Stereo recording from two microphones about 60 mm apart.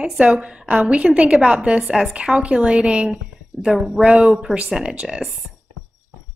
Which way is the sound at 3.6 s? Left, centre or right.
Centre.